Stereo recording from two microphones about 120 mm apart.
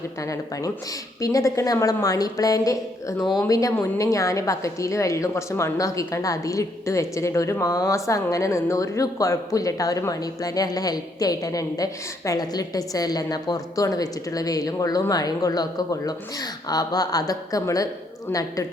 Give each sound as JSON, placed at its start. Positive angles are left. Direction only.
{"t": 0.2, "sound": "a woman's voice", "side_deg": 25}